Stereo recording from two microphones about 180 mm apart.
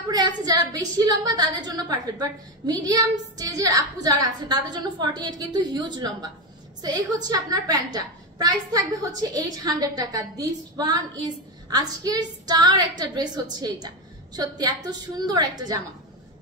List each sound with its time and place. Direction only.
0.1 s a woman's voice: 20° right (ahead or behind)